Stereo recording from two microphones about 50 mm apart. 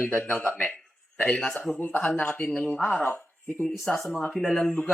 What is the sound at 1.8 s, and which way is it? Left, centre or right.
Speech, left.